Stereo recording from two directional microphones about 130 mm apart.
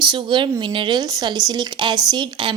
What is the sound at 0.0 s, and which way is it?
Speech, 35° right (ahead or behind).